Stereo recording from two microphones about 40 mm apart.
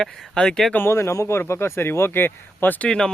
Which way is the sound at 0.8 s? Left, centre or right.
Left.